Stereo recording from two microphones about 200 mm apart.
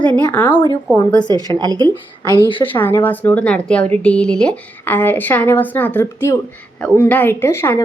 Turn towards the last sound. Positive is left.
turn(degrees=10)  # may be behind; listen again after turning